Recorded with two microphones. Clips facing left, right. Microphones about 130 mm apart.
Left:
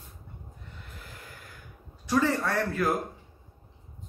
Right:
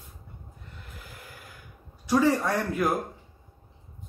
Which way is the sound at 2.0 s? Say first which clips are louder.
Right 3 dB; 15° right (ahead or behind).